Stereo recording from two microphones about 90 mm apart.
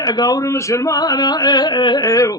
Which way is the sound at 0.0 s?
45° left (ahead or behind).